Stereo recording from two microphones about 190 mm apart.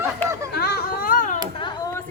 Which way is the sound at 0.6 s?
55° left (ahead or behind).